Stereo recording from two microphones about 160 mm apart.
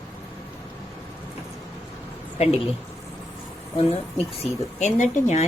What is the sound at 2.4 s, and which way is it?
Speech, 40° left (ahead or behind).